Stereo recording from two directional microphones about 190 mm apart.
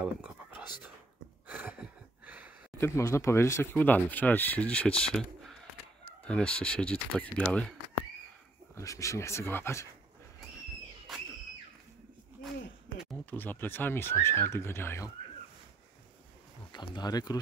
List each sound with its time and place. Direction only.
0.0 s whispering: 5° right (ahead or behind)
1.5 s a sound: 5° right (ahead or behind)
2.8 s speech: 15° left (ahead or behind)
8.7 s speech: 15° left (ahead or behind)
13.2 s speech: 10° left (ahead or behind)
16.7 s speech: 20° left (ahead or behind)